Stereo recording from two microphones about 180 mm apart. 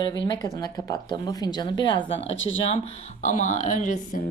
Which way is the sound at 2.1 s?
90° left.